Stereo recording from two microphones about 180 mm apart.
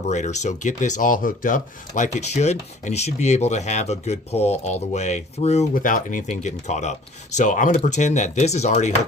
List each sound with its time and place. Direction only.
0.1 s speech: 40° left (ahead or behind)
2.1 s speech: 40° left (ahead or behind)